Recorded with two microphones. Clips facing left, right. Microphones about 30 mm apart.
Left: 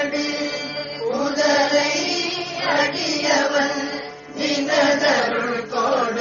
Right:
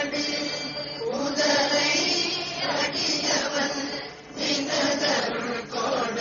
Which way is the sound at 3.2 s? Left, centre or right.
Centre.